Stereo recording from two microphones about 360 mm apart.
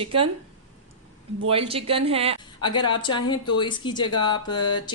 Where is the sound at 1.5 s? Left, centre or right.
Centre.